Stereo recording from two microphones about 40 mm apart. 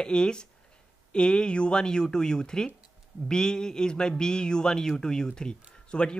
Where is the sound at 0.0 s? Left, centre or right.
Left.